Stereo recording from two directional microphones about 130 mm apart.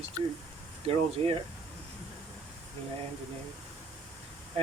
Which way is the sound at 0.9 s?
50° right (ahead or behind).